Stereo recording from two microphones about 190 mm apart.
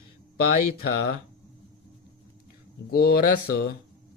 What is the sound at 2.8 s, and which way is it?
Speech, 55° left (ahead or behind).